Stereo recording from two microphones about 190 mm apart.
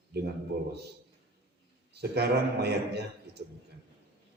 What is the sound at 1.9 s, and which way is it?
A man's voice, 60° right (ahead or behind).